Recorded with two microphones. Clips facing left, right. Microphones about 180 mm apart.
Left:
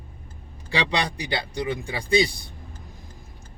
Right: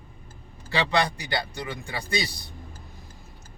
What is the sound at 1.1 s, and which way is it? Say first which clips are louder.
Speech: left 2 dB; 15° left (ahead or behind).